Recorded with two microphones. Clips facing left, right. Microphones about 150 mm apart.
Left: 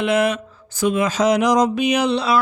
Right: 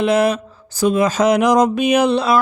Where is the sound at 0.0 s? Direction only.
35° right (ahead or behind).